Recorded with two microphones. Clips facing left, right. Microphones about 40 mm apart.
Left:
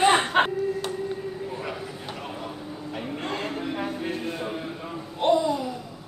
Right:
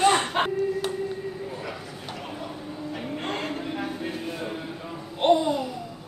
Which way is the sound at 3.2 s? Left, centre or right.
Right.